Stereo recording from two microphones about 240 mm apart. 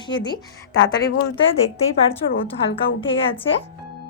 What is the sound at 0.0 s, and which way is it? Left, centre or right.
Speech, centre.